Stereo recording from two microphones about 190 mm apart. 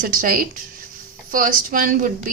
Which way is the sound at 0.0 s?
45° right (ahead or behind).